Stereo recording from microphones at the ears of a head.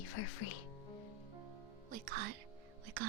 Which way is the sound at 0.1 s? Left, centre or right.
Left.